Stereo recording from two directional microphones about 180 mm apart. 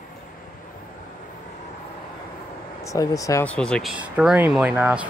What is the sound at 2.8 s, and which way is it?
Speech, 20° left (ahead or behind).